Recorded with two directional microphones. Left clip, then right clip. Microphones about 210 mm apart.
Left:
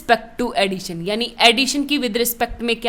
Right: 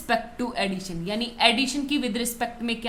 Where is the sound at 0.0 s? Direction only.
50° left (ahead or behind).